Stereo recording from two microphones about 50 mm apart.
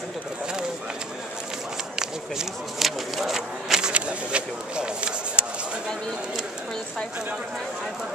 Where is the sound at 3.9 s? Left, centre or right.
Right.